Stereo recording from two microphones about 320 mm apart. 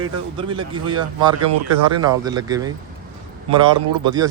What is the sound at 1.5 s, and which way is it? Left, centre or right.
Speech, right.